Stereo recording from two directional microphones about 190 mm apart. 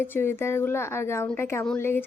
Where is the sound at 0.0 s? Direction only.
10° left (ahead or behind).